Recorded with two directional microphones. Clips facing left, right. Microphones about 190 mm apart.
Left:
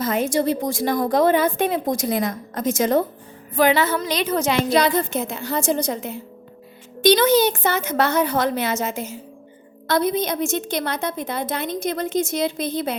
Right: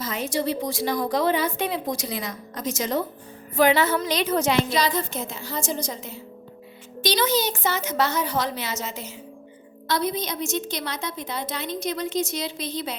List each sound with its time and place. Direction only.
0.0 s a woman's voice: 50° left (ahead or behind)